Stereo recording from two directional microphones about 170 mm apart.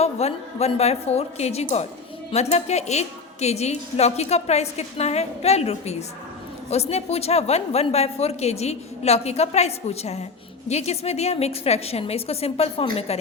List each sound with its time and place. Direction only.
0.0 s a woman's voice: 40° left (ahead or behind)